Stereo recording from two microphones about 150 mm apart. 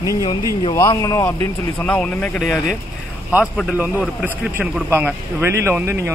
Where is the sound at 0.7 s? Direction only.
20° left (ahead or behind).